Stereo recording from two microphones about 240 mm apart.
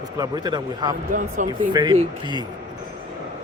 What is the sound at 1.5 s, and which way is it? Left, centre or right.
Speech, centre.